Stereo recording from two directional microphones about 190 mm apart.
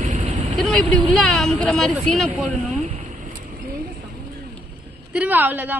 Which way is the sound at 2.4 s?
40° right (ahead or behind).